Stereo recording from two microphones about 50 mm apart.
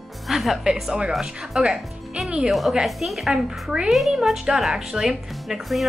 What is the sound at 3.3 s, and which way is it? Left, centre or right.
Speech, centre.